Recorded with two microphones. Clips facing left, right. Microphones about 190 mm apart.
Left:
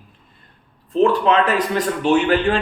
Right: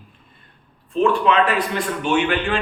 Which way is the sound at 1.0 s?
40° left (ahead or behind).